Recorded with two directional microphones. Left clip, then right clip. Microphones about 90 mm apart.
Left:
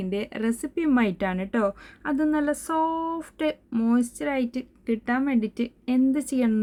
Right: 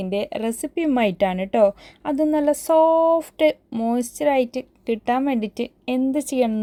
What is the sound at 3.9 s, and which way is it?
A woman's voice, 50° right (ahead or behind).